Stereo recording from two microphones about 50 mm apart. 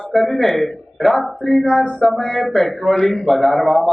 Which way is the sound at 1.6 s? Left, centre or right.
Centre.